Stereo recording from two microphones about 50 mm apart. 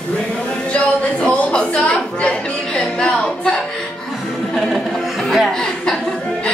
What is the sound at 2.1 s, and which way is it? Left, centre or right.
Music, left.